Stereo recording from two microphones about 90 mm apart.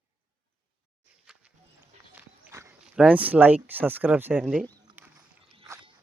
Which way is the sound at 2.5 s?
35° right (ahead or behind).